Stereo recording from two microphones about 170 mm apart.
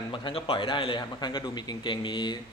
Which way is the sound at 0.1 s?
30° left (ahead or behind).